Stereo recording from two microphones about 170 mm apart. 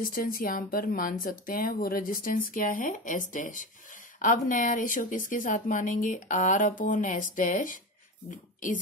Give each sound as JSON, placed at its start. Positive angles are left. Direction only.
{"t": 0.0, "sound": "a woman's voice", "side_deg": 55}